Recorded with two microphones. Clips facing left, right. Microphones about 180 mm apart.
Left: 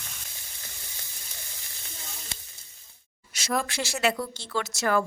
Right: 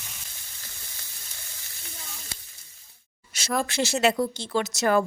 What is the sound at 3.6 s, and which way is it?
Speech, 25° right (ahead or behind).